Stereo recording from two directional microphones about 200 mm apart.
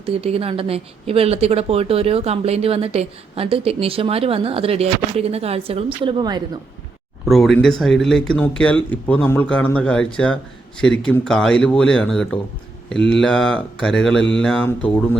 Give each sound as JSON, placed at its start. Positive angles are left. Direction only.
{"t": 0.0, "sound": "a woman's voice", "side_deg": -30}
{"t": 7.3, "sound": "speech", "side_deg": 0}
{"t": 14.2, "sound": "mantra", "side_deg": 65}
{"t": 14.4, "sound": "speech", "side_deg": 5}